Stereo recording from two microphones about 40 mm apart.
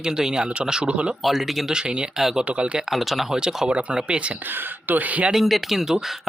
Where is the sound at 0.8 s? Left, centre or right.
Right.